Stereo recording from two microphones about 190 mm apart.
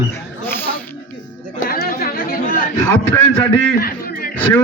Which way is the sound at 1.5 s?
50° left (ahead or behind).